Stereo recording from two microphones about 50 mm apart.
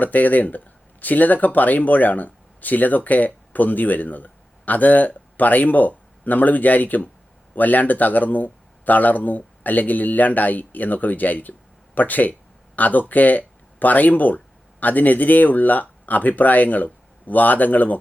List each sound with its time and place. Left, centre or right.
0.0 s speech: left